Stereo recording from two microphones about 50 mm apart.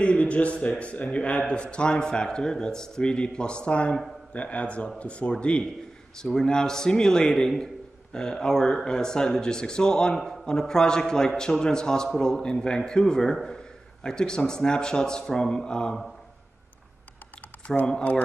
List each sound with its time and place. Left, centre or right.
0.0 s a man's voice: left
17.7 s a man's voice: centre